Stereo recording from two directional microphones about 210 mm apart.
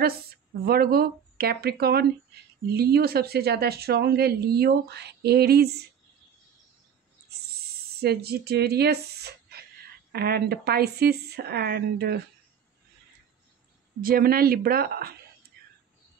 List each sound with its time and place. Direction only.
0.0 s a woman's voice: 45° right (ahead or behind)
8.0 s speech: 50° right (ahead or behind)
14.0 s speech: 45° right (ahead or behind)